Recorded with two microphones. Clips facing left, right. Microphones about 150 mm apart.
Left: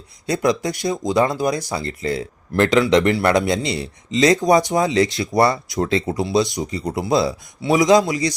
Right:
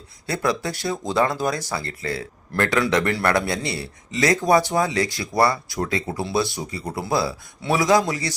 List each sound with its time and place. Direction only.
0.3 s speech: 15° left (ahead or behind)